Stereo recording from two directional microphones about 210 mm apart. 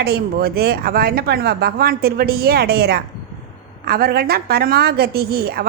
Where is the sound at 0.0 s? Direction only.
50° right (ahead or behind).